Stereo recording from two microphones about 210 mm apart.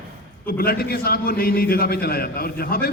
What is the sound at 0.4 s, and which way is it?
A man's voice, 45° left (ahead or behind).